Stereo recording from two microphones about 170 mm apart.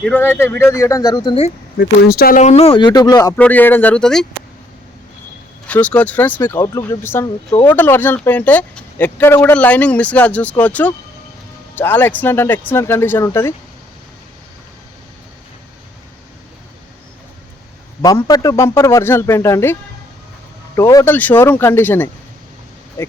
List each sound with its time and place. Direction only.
0.0 s speech: 10° left (ahead or behind); by 1.5 s 30° left (ahead or behind)
1.8 s speech: 65° left (ahead or behind)
2.4 s speech: 40° left (ahead or behind); by 3.3 s 20° left (ahead or behind)
3.3 s speech: 10° left (ahead or behind)
5.6 s speech: 10° left (ahead or behind)
18.0 s speech: 20° left (ahead or behind)
20.7 s speech: 15° left (ahead or behind)